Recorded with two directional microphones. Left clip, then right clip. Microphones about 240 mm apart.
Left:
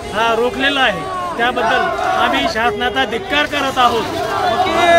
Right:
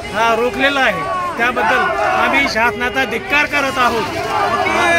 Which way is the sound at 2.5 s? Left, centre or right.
Centre.